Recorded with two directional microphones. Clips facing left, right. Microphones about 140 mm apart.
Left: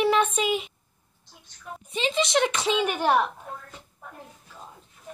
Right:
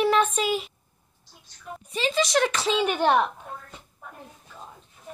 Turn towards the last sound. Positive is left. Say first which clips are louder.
# right 1 dB
turn(degrees=5)  # may be behind; listen again after turning